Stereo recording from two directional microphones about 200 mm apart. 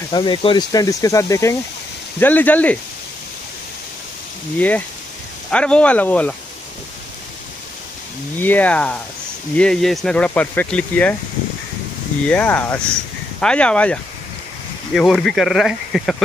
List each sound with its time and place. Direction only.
0.1 s speech: 25° left (ahead or behind); by 2.8 s 10° left (ahead or behind)
4.6 s speech: 10° left (ahead or behind)
8.4 s speech: 10° left (ahead or behind)
12.3 s speech: 5° left (ahead or behind)
15.0 s speech: centre (ahead or behind)